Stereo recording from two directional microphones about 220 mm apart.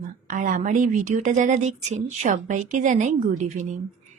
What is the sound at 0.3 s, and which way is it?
Speech, 35° right (ahead or behind).